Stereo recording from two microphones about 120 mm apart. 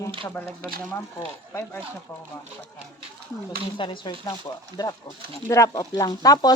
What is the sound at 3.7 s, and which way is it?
Speech, 45° left (ahead or behind).